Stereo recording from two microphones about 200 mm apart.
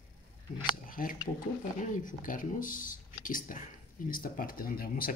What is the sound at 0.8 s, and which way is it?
Scissors, 45° left (ahead or behind).